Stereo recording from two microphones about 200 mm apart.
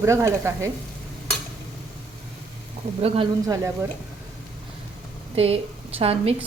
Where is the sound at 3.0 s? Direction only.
30° right (ahead or behind).